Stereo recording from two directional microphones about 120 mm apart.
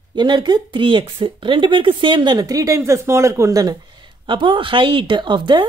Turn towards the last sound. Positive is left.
turn(degrees=-40)  # may be behind; listen again after turning